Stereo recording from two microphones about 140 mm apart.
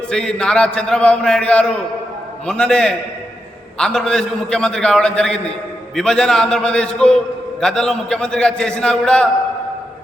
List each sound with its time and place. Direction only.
0.1 s a man's voice: 5° left (ahead or behind)